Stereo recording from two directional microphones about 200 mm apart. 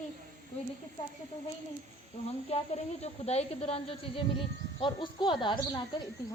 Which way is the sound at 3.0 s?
30° left (ahead or behind).